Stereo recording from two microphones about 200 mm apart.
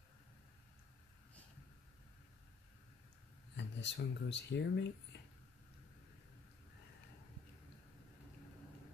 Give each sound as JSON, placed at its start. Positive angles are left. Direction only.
{"t": 3.5, "sound": "speech", "side_deg": 65}